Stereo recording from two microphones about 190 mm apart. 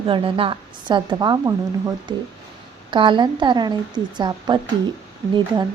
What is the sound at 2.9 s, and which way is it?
A woman's voice, 25° right (ahead or behind).